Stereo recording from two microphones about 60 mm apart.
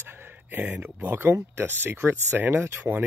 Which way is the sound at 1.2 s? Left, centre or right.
Right.